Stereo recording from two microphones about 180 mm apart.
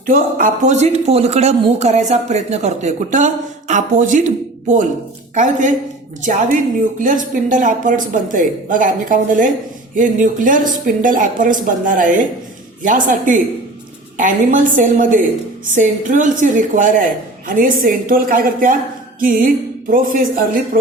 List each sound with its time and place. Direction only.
0.0 s speech: 50° right (ahead or behind)
5.3 s speech: 45° right (ahead or behind)